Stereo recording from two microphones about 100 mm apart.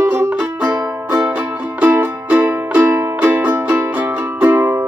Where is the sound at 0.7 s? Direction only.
30° right (ahead or behind).